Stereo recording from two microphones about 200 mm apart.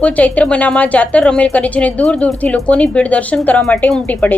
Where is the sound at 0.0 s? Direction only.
5° left (ahead or behind).